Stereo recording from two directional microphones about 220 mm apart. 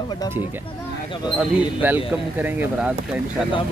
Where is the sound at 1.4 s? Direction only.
10° right (ahead or behind).